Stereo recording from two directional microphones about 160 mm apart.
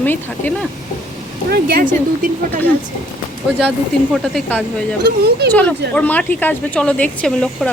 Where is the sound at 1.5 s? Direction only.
60° right (ahead or behind).